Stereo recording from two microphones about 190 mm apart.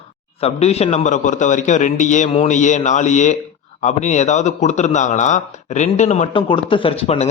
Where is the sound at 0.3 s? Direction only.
35° left (ahead or behind).